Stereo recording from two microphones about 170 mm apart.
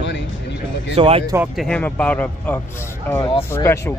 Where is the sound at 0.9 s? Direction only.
35° right (ahead or behind).